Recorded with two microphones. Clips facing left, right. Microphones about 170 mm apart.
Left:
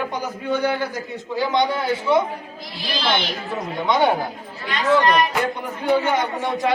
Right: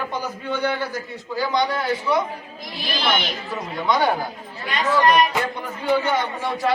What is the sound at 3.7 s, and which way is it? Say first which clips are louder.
Speech: left 2 dB; 25° left (ahead or behind).